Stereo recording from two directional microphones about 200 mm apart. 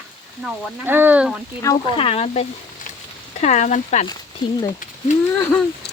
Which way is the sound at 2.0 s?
30° left (ahead or behind).